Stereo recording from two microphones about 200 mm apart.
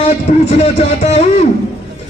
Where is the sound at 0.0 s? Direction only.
35° left (ahead or behind).